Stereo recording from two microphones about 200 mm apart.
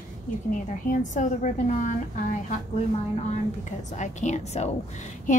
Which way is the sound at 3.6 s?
35° left (ahead or behind).